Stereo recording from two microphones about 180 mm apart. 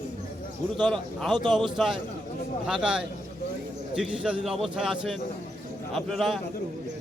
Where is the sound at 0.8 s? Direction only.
Centre (ahead or behind).